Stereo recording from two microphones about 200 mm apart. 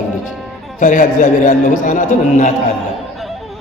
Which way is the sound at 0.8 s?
40° left (ahead or behind).